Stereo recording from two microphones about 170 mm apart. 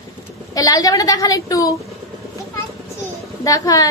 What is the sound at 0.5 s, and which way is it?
A woman's voice, 20° left (ahead or behind).